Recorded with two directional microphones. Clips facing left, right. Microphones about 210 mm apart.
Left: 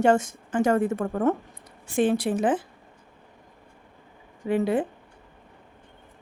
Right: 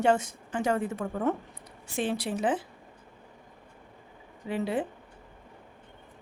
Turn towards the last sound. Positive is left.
turn(degrees=50)  # may be behind; listen again after turning